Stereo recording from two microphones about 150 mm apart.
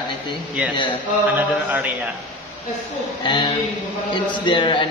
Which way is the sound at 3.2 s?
30° left (ahead or behind).